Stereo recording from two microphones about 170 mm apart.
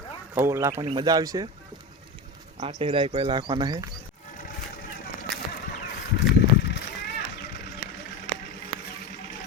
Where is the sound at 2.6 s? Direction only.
35° right (ahead or behind).